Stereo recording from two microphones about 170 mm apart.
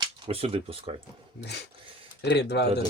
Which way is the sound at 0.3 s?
35° right (ahead or behind).